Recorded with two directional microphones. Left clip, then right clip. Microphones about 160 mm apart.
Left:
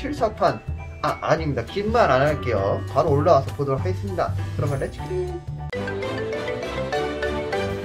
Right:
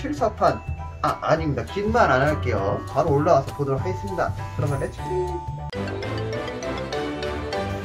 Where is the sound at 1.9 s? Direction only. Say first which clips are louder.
Left 1 dB; 30° left (ahead or behind).